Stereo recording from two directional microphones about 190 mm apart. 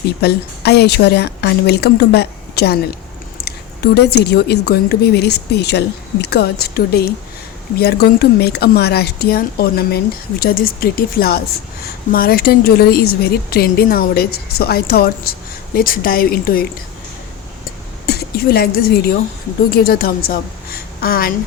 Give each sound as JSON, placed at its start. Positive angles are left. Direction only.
{"t": 0.2, "sound": "a woman's voice", "side_deg": 60}
{"t": 3.9, "sound": "a woman's voice", "side_deg": 60}
{"t": 18.0, "sound": "speech", "side_deg": 55}